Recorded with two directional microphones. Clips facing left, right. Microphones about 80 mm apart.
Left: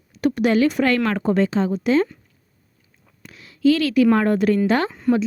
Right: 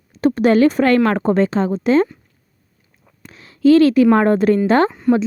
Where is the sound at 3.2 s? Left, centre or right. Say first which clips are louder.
Right 4 dB; right.